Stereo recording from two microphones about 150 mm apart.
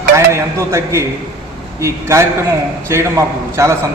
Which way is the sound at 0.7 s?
20° right (ahead or behind).